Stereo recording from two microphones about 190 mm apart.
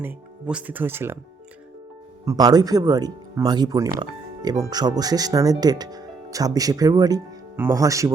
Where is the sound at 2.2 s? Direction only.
20° right (ahead or behind).